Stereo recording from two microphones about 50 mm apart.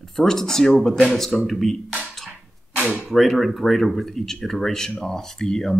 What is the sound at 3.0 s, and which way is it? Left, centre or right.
Speech, centre.